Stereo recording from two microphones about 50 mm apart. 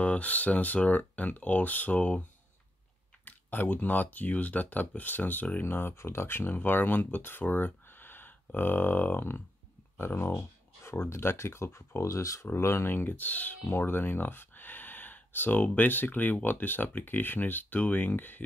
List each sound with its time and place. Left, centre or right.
0.0 s speech: left
3.3 s speech: left
5.6 s speech: left
9.9 s a sound: left
10.9 s speech: left
12.4 s speech: left
12.9 s speech: left
13.7 s speech: left